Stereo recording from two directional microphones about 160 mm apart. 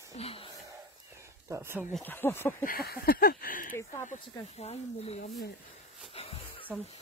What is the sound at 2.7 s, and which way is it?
Speech, 70° left (ahead or behind).